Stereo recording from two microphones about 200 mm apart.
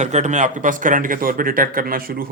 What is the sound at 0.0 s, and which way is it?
Speech, 35° right (ahead or behind).